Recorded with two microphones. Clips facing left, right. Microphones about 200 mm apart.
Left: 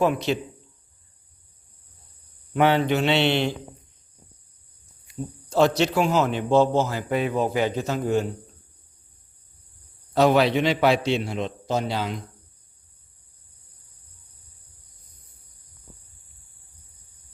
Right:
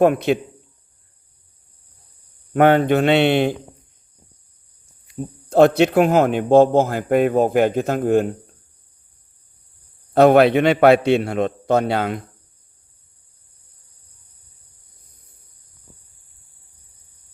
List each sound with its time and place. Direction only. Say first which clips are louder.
0.0 s a man's voice: right 7 dB; 55° right (ahead or behind)
2.5 s speech: right 6 dB; 50° right (ahead or behind)
5.5 s speech: right 7 dB; 55° right (ahead or behind)
10.2 s a man's voice: right 7 dB; 55° right (ahead or behind)